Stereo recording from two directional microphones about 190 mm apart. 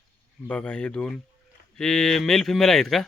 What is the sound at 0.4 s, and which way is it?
Speech, 5° left (ahead or behind).